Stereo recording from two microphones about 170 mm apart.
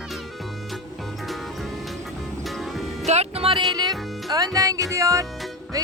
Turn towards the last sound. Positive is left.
turn(degrees=-20)  # may be behind; listen again after turning